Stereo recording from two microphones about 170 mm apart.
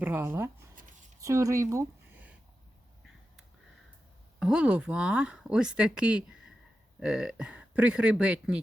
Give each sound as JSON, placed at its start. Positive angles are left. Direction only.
{"t": 0.0, "sound": "speech", "side_deg": -15}
{"t": 0.8, "sound": "a sound", "side_deg": -50}
{"t": 1.2, "sound": "speech", "side_deg": -20}
{"t": 4.4, "sound": "speech", "side_deg": -5}